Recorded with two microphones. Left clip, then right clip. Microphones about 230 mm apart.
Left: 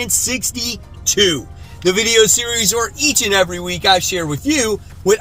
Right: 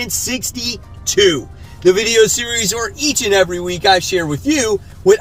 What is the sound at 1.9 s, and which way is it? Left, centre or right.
Speech, centre.